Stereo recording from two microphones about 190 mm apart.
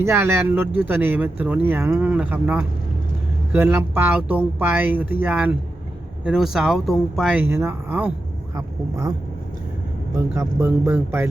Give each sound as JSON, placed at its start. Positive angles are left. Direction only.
{"t": 0.0, "sound": "speech", "side_deg": -15}
{"t": 10.2, "sound": "speech", "side_deg": -15}